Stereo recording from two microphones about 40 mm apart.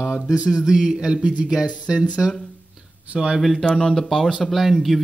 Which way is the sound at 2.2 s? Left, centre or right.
Centre.